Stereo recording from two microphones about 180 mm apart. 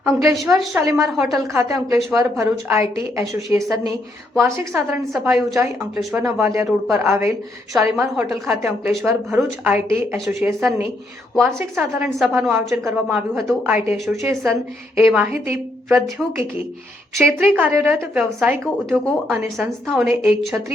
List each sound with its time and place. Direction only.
0.0 s speech: 15° right (ahead or behind)
6.4 s speech: 15° right (ahead or behind)
6.7 s speech: centre (ahead or behind)
7.1 s speech: 15° right (ahead or behind)
8.1 s speech: 5° right (ahead or behind)
18.6 s speech: 5° left (ahead or behind)